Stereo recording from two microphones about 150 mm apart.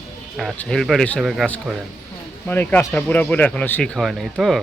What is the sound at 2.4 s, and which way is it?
A man's voice, 15° left (ahead or behind).